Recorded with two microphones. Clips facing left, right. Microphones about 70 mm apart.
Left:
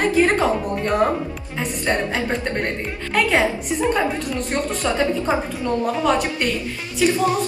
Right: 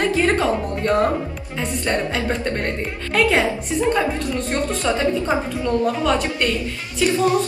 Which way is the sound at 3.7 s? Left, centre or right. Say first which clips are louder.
Right 2 dB; centre.